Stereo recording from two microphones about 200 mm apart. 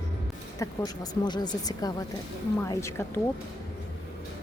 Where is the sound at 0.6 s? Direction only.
20° left (ahead or behind).